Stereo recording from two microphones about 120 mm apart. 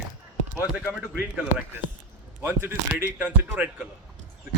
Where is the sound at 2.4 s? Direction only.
20° right (ahead or behind).